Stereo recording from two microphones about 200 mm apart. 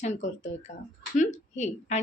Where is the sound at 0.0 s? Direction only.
35° left (ahead or behind).